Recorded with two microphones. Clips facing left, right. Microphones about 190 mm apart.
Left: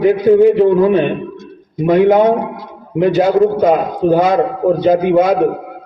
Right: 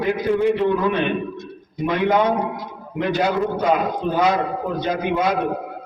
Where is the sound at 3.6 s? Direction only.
50° left (ahead or behind).